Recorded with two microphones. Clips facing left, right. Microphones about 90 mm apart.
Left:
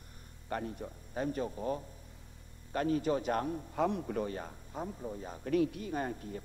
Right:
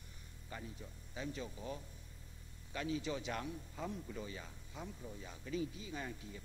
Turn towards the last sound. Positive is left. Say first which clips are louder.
# left 9 dB
turn(degrees=50)  # may be behind; listen again after turning